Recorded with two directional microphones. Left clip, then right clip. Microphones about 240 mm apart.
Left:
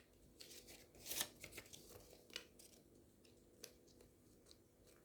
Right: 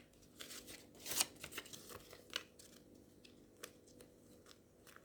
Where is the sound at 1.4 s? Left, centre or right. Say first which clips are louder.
Right 6 dB; centre.